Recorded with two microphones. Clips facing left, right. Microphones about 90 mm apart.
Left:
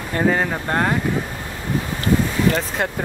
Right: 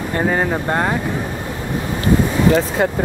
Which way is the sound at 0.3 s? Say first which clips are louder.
Right 2 dB; 10° right (ahead or behind).